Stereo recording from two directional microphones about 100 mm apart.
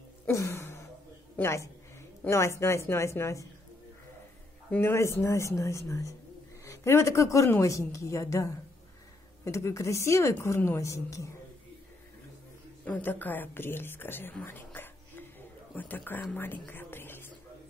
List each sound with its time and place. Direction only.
0.3 s a sound: 30° left (ahead or behind)
1.3 s a woman's voice: 25° left (ahead or behind)
4.6 s a woman's voice: 20° left (ahead or behind)
12.8 s a woman's voice: 15° left (ahead or behind)
14.4 s whispering: 20° left (ahead or behind)
15.7 s speech: 15° left (ahead or behind)
16.3 s music: 20° left (ahead or behind)